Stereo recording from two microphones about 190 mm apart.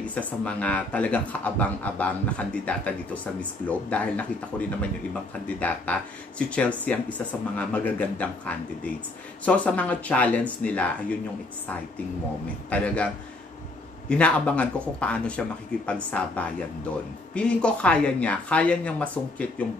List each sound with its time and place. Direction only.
0.5 s speech: 5° left (ahead or behind)
12.6 s speech: 5° left (ahead or behind)